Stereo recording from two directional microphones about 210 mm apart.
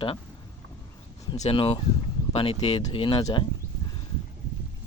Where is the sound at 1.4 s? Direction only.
30° left (ahead or behind).